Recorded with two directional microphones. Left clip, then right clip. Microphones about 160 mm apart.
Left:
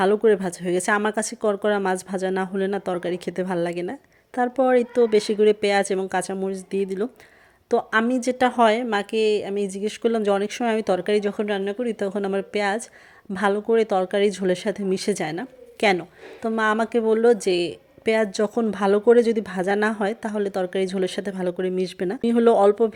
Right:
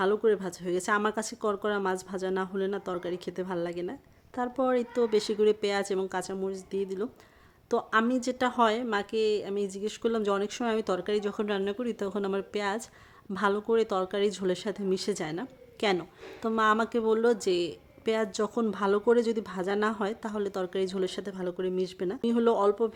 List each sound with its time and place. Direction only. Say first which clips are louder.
0.0 s a woman's voice: left 7 dB; 20° left (ahead or behind)